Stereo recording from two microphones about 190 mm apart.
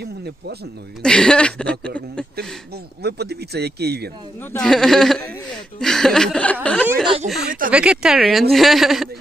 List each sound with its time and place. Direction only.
0.0 s speech: 60° right (ahead or behind)
1.0 s speech: 5° left (ahead or behind)
3.0 s speech: 60° right (ahead or behind)
4.5 s speech: 5° left (ahead or behind)
7.4 s speech: 45° right (ahead or behind)
7.7 s speech: 5° right (ahead or behind)